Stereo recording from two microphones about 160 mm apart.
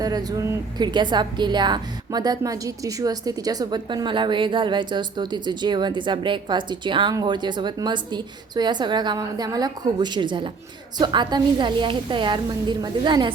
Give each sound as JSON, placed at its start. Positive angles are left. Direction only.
{"t": 0.0, "sound": "a woman's voice", "side_deg": -25}